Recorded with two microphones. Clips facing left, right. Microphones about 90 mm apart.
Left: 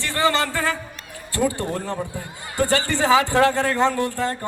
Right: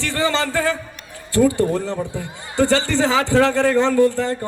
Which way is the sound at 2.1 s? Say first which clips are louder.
Right 4 dB; 25° right (ahead or behind).